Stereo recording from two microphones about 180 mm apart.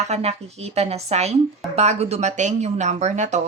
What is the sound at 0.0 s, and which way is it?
Speech, 35° right (ahead or behind).